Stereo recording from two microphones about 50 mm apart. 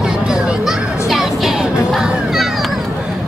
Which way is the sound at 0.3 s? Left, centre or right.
Centre.